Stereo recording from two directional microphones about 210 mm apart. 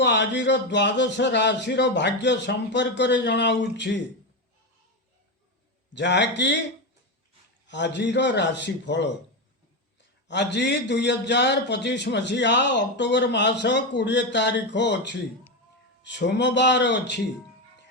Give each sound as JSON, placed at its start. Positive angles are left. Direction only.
{"t": 0.0, "sound": "a man's voice", "side_deg": 55}
{"t": 5.9, "sound": "a man's voice", "side_deg": 55}
{"t": 7.7, "sound": "a man's voice", "side_deg": 55}
{"t": 10.2, "sound": "a man's voice", "side_deg": 55}